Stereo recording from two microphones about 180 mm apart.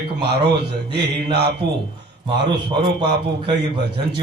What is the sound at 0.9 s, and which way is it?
Speech, 65° right (ahead or behind).